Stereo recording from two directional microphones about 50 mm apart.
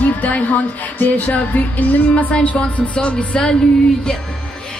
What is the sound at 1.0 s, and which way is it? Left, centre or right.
Music, left.